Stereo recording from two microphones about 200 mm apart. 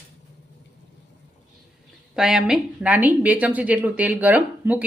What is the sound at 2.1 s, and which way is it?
A woman's voice, 5° right (ahead or behind).